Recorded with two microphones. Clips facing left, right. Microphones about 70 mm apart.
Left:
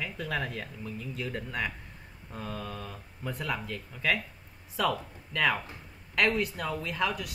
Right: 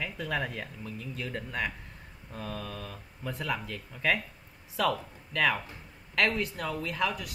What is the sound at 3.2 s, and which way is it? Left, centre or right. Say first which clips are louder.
Speech: even; centre.